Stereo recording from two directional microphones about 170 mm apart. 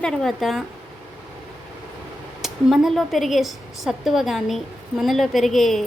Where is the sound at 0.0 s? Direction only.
5° left (ahead or behind).